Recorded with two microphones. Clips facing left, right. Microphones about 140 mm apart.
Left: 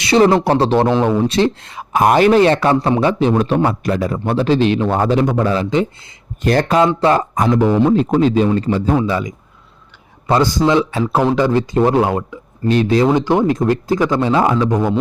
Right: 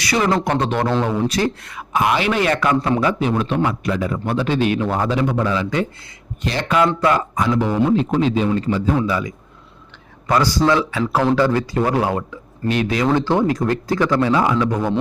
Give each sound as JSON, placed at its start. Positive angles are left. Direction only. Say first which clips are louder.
{"t": 0.0, "sound": "speech", "louder": "left 7 dB", "side_deg": 30}
{"t": 2.4, "sound": "speech", "louder": "left 5 dB", "side_deg": 30}
{"t": 6.4, "sound": "speech", "louder": "left 9 dB", "side_deg": 50}
{"t": 6.8, "sound": "speech", "louder": "left 3 dB", "side_deg": 30}
{"t": 7.3, "sound": "speech", "louder": "left 4 dB", "side_deg": 45}
{"t": 9.0, "sound": "speech", "louder": "left 2 dB", "side_deg": 25}
{"t": 11.2, "sound": "speech", "louder": "left 2 dB", "side_deg": 15}
{"t": 12.6, "sound": "speech", "louder": "left 6 dB", "side_deg": 35}
{"t": 13.1, "sound": "speech", "louder": "left 3 dB", "side_deg": 15}